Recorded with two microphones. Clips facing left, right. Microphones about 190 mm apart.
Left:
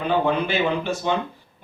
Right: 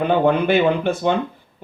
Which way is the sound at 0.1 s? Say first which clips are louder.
Right 4 dB; 55° right (ahead or behind).